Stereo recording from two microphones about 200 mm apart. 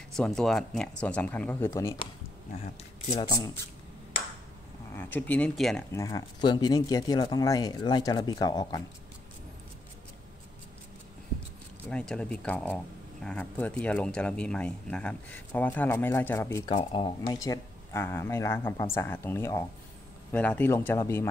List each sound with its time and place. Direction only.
0.1 s speech: 5° left (ahead or behind)
2.8 s speech: 30° left (ahead or behind)
3.3 s speech: 15° left (ahead or behind)
4.9 s speech: 10° left (ahead or behind)
5.9 s speech: 20° left (ahead or behind)
11.9 s speech: 5° left (ahead or behind)
16.7 s speech: 25° left (ahead or behind)